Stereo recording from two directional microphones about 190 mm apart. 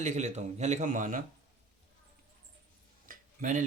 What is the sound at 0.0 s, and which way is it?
Speech, 40° right (ahead or behind).